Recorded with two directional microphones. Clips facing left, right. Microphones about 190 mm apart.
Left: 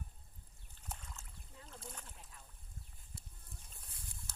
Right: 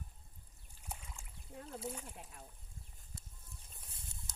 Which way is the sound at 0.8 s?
10° right (ahead or behind).